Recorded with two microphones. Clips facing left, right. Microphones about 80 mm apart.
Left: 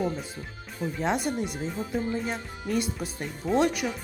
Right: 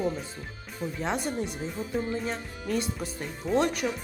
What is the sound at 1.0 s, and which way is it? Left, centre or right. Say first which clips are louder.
Speech: left 3 dB; centre.